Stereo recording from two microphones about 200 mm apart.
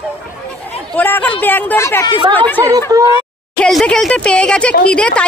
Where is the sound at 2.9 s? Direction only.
20° right (ahead or behind).